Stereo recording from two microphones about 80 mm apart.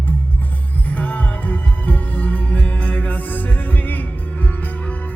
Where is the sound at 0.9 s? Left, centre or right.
Centre.